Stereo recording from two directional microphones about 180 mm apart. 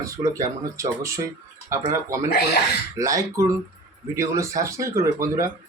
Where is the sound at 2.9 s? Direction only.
20° right (ahead or behind).